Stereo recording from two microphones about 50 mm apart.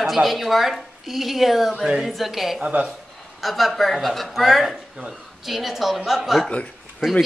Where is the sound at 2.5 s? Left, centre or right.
Right.